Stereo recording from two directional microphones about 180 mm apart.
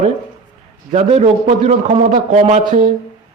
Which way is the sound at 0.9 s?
40° right (ahead or behind).